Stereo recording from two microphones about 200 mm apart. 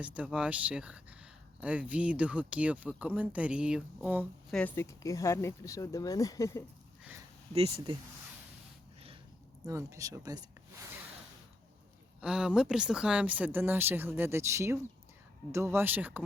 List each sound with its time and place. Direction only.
0.0 s speech: 5° right (ahead or behind)
4.5 s speech: 10° left (ahead or behind)
7.5 s speech: 30° right (ahead or behind)
9.6 s speech: 15° right (ahead or behind)
12.2 s speech: 5° right (ahead or behind)